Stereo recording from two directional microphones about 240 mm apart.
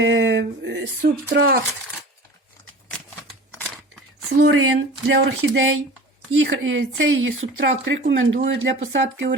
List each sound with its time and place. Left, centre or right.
0.0 s speech: right
4.6 s speech: right